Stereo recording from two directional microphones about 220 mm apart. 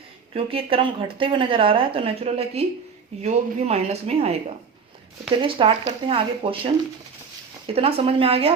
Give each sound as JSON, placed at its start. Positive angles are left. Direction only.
{"t": 0.3, "sound": "a woman's voice", "side_deg": -25}
{"t": 7.7, "sound": "a woman's voice", "side_deg": -25}